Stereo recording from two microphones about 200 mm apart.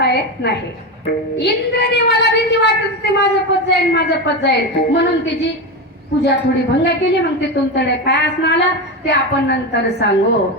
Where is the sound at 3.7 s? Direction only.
55° left (ahead or behind).